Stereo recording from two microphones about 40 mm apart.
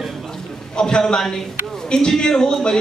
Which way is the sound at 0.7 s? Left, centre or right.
Centre.